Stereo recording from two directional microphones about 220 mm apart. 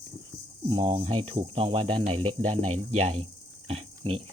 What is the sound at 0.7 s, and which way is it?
Speech, 25° right (ahead or behind).